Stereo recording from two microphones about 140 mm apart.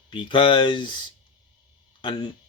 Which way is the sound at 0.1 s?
35° left (ahead or behind).